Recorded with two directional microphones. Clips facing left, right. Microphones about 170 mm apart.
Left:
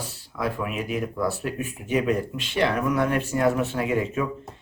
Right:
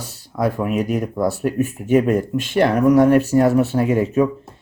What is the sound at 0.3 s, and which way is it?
Speech, 40° right (ahead or behind).